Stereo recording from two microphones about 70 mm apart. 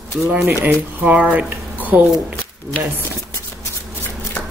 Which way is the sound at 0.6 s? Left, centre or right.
Centre.